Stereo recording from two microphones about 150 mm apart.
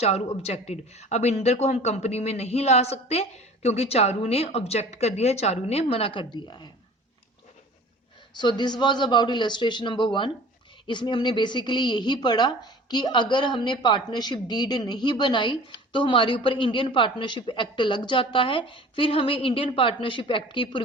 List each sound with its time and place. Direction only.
0.0 s speech: 45° left (ahead or behind)
8.3 s a woman's voice: 30° left (ahead or behind)